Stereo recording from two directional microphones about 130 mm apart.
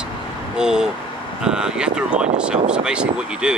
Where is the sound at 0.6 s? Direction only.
5° right (ahead or behind).